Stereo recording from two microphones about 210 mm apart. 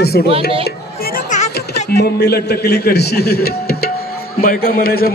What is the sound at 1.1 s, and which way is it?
Music, 35° left (ahead or behind).